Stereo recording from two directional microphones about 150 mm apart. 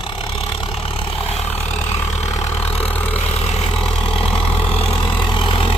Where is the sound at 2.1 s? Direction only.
50° left (ahead or behind).